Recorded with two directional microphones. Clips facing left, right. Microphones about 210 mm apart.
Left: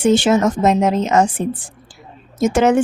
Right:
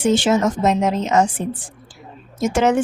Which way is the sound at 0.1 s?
55° left (ahead or behind).